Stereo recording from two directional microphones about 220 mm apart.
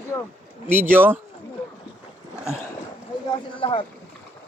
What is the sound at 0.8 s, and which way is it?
Speech, 10° right (ahead or behind).